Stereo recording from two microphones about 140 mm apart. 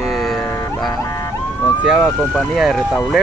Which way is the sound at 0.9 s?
30° left (ahead or behind).